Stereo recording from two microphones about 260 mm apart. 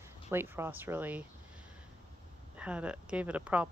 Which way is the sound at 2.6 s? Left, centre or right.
Centre.